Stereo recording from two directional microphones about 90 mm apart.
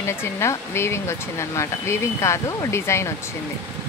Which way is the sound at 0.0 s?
30° left (ahead or behind).